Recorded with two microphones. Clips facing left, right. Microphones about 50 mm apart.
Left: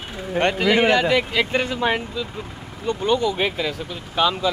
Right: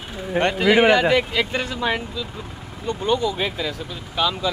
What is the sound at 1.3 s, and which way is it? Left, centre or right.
Speech, centre.